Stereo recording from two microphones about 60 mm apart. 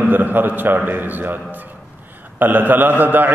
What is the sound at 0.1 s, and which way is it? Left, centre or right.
A man's voice, right.